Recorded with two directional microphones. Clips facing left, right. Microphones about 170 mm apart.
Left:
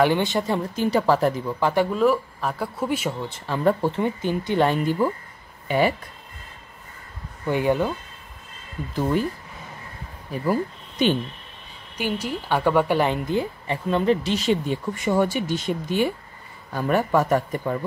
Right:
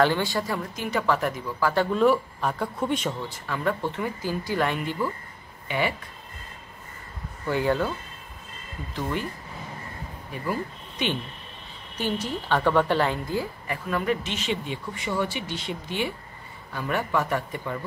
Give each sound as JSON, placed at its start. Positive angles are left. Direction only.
{"t": 0.0, "sound": "a woman's voice", "side_deg": 20}
{"t": 1.9, "sound": "speech", "side_deg": 0}
{"t": 3.3, "sound": "a woman's voice", "side_deg": 30}
{"t": 5.7, "sound": "speech", "side_deg": 40}
{"t": 7.4, "sound": "speech", "side_deg": 15}
{"t": 10.4, "sound": "speech", "side_deg": 40}
{"t": 12.0, "sound": "a woman's voice", "side_deg": 10}